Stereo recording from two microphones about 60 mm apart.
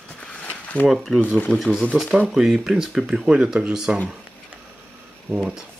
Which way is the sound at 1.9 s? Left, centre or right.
Right.